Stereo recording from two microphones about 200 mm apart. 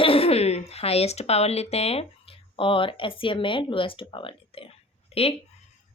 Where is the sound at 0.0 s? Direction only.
30° left (ahead or behind).